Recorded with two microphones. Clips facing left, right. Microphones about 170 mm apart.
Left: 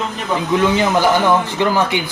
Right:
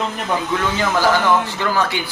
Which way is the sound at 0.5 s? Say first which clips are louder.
Left 8 dB; 20° left (ahead or behind).